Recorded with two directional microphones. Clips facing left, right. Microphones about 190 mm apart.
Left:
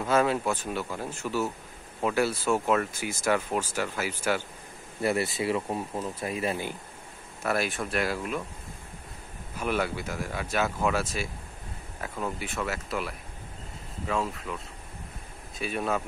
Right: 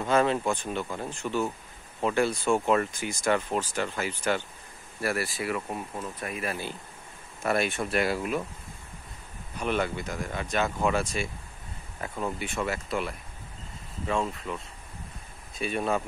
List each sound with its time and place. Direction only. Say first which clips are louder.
0.0 s speech: even; 5° left (ahead or behind)
5.0 s speech: left 3 dB; 20° left (ahead or behind)
7.4 s speech: right 2 dB; centre (ahead or behind)
9.6 s speech: even; 5° left (ahead or behind)
15.6 s speech: right 1 dB; centre (ahead or behind)